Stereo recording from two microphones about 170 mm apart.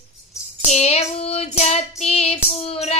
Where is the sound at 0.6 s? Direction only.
40° left (ahead or behind).